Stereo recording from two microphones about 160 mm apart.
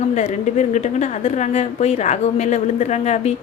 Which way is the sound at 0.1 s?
50° left (ahead or behind).